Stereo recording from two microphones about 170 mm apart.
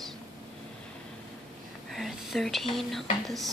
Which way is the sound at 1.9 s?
Centre (ahead or behind).